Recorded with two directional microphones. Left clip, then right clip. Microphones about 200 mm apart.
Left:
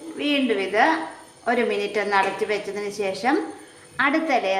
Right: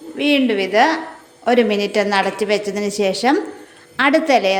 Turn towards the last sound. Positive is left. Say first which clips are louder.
# right 7 dB
turn(degrees=-45)  # may be behind; listen again after turning